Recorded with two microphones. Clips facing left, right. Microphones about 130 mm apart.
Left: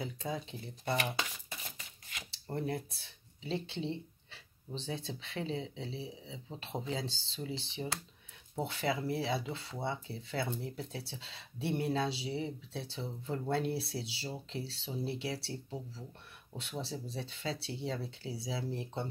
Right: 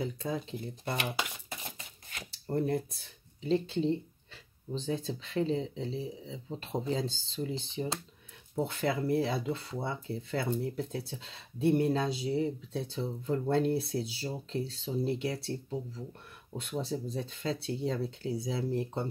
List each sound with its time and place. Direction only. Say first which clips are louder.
0.0 s speech: right 4 dB; 40° right (ahead or behind)
2.0 s shuffling cards: right 3 dB; 40° right (ahead or behind)
2.5 s speech: right 6 dB; 40° right (ahead or behind)